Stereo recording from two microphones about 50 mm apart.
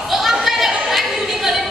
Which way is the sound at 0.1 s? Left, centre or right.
Centre.